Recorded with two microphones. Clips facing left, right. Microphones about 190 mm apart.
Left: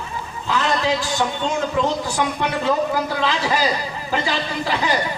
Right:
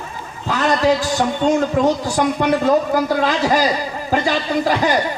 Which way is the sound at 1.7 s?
45° right (ahead or behind).